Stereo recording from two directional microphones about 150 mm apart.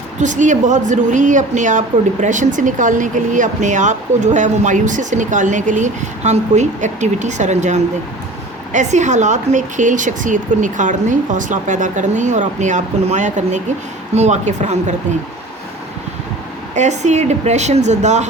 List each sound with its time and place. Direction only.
0.2 s a woman's voice: 55° right (ahead or behind)
16.7 s a woman's voice: 50° right (ahead or behind)